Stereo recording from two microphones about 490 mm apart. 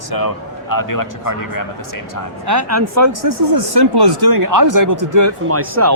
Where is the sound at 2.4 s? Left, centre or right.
Right.